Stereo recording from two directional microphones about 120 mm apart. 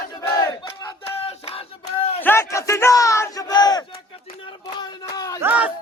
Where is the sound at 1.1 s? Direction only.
55° left (ahead or behind).